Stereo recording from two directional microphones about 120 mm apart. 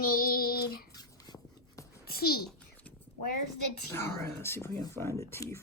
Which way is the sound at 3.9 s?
20° left (ahead or behind).